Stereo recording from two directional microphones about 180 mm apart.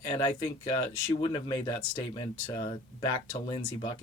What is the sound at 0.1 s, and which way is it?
Speech, 25° left (ahead or behind).